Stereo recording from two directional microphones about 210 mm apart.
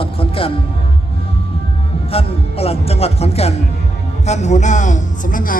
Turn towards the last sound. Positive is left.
turn(degrees=40)  # may be behind; listen again after turning